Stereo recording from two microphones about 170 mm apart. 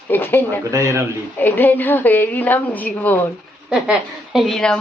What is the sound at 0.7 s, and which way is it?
Speech, 20° right (ahead or behind).